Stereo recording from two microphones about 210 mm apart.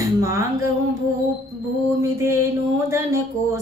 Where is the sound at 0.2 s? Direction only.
15° right (ahead or behind).